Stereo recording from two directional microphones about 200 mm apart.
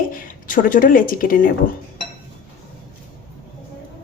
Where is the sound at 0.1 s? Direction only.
45° left (ahead or behind).